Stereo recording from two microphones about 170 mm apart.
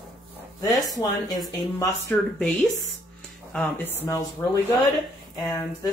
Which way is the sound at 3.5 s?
10° left (ahead or behind).